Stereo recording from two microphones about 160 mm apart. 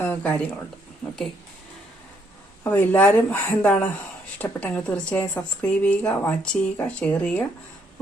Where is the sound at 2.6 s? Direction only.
10° left (ahead or behind).